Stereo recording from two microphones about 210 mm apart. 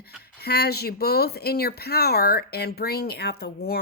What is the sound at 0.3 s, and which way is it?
Speech, 50° left (ahead or behind).